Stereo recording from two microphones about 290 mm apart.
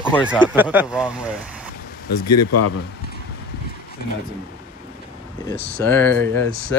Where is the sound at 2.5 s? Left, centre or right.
Left.